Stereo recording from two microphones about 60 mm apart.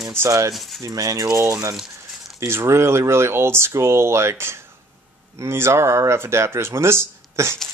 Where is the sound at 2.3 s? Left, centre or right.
Right.